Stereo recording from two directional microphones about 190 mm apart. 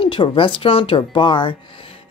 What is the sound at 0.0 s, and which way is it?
Speech, 25° left (ahead or behind).